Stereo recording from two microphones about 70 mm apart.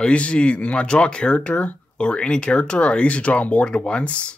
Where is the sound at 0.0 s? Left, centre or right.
Centre.